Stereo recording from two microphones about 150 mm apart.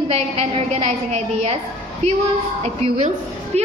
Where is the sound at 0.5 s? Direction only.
40° right (ahead or behind).